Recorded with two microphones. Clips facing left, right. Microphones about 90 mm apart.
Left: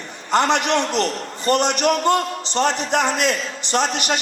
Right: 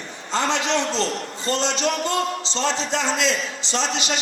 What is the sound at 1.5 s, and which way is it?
A man's voice, 60° left (ahead or behind).